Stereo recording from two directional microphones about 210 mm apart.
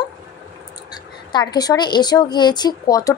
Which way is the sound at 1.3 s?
20° left (ahead or behind).